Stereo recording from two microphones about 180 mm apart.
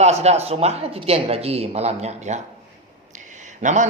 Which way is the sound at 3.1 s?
45° right (ahead or behind).